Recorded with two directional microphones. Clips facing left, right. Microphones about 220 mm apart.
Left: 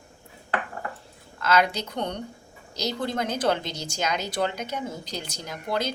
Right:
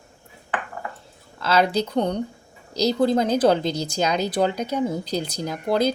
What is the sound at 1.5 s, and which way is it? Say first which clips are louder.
Speech: right 3 dB; 30° right (ahead or behind).